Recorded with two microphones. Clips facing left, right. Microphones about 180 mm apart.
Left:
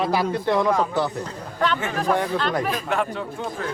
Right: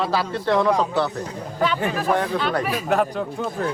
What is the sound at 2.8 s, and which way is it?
Speech, 40° right (ahead or behind).